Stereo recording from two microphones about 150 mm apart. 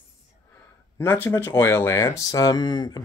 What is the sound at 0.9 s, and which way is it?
Speech, 15° left (ahead or behind).